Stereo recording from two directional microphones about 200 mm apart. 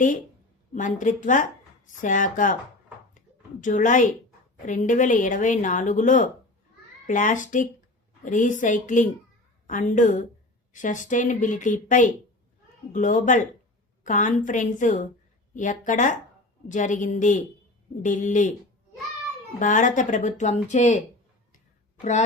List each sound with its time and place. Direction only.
0.7 s speech: 40° left (ahead or behind)
3.2 s a sound: 40° left (ahead or behind)
4.6 s speech: 40° left (ahead or behind)
19.5 s speech: 40° left (ahead or behind)